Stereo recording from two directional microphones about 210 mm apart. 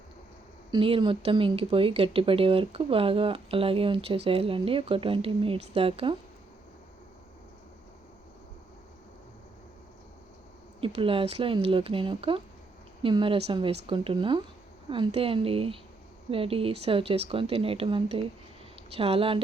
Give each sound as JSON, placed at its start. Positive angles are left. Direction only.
{"t": 0.7, "sound": "speech", "side_deg": -25}
{"t": 10.8, "sound": "speech", "side_deg": -25}